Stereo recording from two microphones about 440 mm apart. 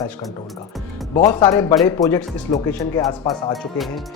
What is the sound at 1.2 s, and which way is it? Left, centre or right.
Speech, centre.